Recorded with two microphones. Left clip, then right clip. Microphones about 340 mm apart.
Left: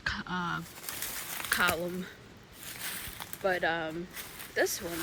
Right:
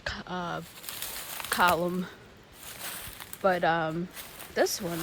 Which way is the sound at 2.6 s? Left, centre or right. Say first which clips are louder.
Even; centre.